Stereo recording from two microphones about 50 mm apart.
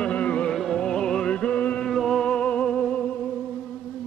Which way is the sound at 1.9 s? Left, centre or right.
Centre.